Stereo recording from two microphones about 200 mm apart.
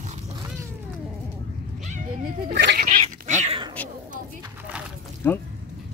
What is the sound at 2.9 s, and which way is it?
Dog, 35° right (ahead or behind).